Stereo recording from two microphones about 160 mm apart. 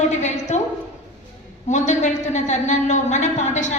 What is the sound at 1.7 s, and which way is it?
A woman's voice, 50° left (ahead or behind).